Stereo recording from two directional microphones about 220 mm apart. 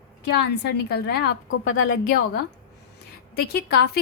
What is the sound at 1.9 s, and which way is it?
Speech, 40° left (ahead or behind).